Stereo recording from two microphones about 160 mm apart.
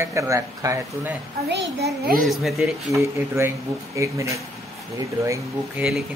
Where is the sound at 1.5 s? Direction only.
90° right.